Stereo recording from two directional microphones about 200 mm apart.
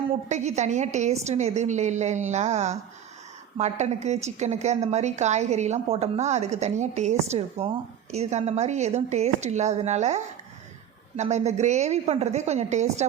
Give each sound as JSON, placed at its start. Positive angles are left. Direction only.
{"t": 0.1, "sound": "a woman's voice", "side_deg": -35}